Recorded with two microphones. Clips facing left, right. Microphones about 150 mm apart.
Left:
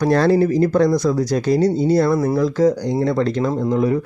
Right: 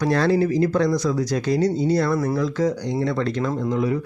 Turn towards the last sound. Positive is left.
turn(degrees=40)  # may be behind; listen again after turning